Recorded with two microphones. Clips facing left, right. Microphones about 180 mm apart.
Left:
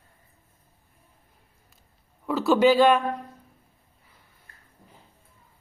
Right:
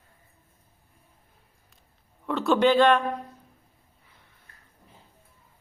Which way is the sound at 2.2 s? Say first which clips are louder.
Left 2 dB; 5° left (ahead or behind).